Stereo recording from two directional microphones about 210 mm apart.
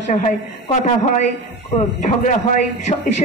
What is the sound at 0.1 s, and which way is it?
A woman's voice, 35° left (ahead or behind).